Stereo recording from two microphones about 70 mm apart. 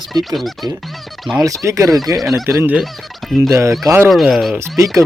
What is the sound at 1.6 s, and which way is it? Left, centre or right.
Speech, right.